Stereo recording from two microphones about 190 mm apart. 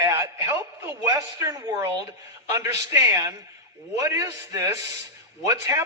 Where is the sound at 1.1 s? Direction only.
15° right (ahead or behind).